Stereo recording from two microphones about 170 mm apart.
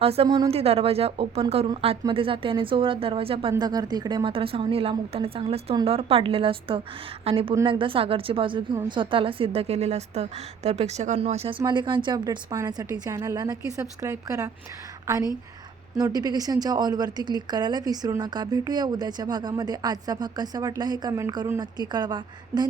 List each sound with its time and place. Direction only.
0.0 s speech: 35° right (ahead or behind)
0.5 s a woman's voice: 35° right (ahead or behind)